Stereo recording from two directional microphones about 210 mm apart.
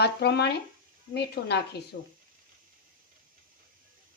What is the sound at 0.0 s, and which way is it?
Speech, 50° left (ahead or behind).